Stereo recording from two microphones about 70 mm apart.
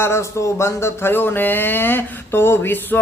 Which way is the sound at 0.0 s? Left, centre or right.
Left.